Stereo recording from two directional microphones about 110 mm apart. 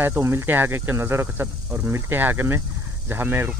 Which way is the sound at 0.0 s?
20° right (ahead or behind).